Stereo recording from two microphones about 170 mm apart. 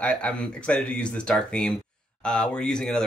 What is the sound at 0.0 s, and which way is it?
Speech, 5° left (ahead or behind).